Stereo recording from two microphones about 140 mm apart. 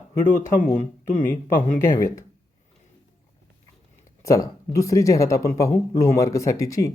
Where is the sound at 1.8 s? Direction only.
20° left (ahead or behind).